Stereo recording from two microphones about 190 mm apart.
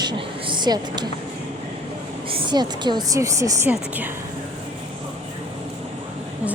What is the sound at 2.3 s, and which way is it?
A woman's voice, 25° right (ahead or behind).